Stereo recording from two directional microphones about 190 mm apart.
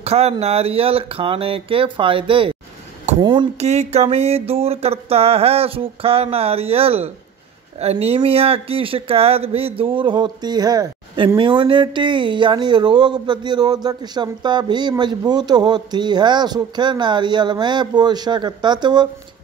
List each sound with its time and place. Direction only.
0.0 s speech: 35° right (ahead or behind)
3.5 s a sound: 35° right (ahead or behind)
7.8 s speech: 30° right (ahead or behind)